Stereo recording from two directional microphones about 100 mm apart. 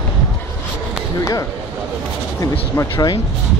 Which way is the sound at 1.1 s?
35° left (ahead or behind).